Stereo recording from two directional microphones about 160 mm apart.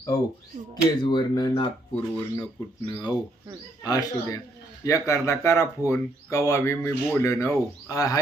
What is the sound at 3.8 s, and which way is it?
Speech, 25° left (ahead or behind).